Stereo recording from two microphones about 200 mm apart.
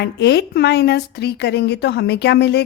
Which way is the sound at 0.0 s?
55° left (ahead or behind).